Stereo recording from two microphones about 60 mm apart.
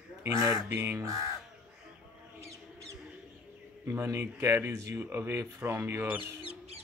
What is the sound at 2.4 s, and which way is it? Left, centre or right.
Rodents, right.